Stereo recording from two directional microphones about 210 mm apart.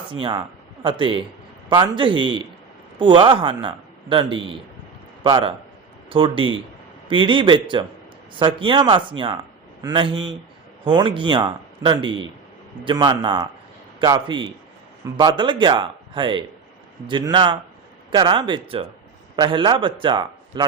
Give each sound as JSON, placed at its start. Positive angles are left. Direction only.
{"t": 0.1, "sound": "a man's voice", "side_deg": -25}